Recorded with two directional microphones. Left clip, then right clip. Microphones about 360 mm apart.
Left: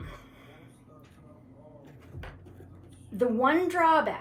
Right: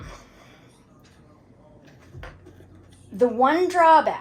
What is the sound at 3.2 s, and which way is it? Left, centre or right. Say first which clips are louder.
Speech: right 6 dB; centre.